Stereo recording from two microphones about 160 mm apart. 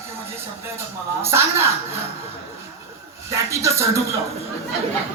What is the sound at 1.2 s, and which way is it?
Speech, 15° right (ahead or behind).